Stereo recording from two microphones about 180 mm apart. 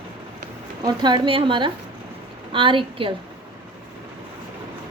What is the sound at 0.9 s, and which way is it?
A woman's voice, 25° right (ahead or behind).